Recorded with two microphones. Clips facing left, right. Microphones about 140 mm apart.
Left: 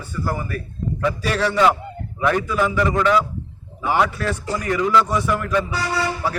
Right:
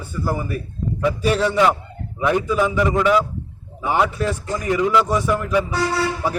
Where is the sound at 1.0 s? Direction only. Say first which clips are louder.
Right 3 dB; 20° right (ahead or behind).